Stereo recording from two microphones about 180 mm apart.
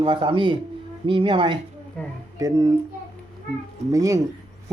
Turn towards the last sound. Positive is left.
turn(degrees=-20)  # may be behind; listen again after turning